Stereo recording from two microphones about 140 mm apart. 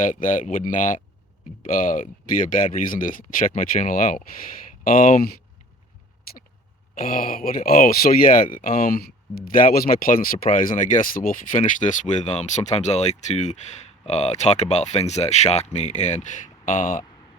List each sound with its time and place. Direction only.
0.0 s speech: 70° left (ahead or behind)
4.8 s speech: 85° left
6.9 s speech: 85° left; by 17.1 s 65° left (ahead or behind)